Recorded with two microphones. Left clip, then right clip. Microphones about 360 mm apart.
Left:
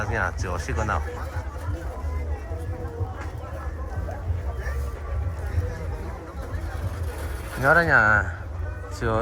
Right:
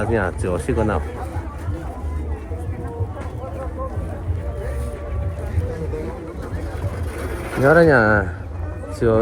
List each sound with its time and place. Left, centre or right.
0.0 s speech: centre
7.5 s speech: centre